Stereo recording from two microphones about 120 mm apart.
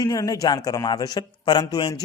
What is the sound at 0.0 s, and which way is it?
A man's voice, 30° left (ahead or behind).